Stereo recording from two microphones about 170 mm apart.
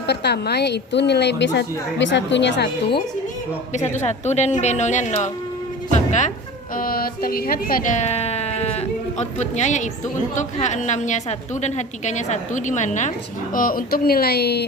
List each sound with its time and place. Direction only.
0.1 s a woman's voice: 75° left (ahead or behind)
3.9 s a woman's voice: 40° left (ahead or behind)
6.7 s a woman's voice: 60° left (ahead or behind)